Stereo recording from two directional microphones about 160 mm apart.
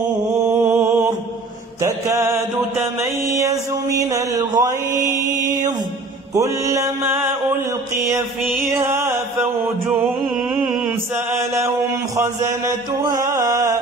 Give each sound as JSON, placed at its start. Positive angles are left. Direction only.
{"t": 0.6, "sound": "mantra", "side_deg": -10}
{"t": 3.0, "sound": "a sound", "side_deg": -20}
{"t": 6.3, "sound": "a sound", "side_deg": -20}
{"t": 8.6, "sound": "music", "side_deg": -15}
{"t": 10.5, "sound": "mantra", "side_deg": -5}
{"t": 12.2, "sound": "mantra", "side_deg": -20}